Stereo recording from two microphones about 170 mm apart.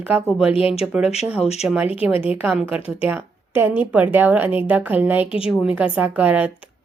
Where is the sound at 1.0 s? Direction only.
40° left (ahead or behind).